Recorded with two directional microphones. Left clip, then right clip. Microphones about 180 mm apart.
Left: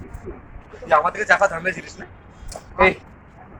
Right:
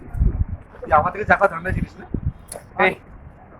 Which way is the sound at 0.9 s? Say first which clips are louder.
Even; 65° right (ahead or behind).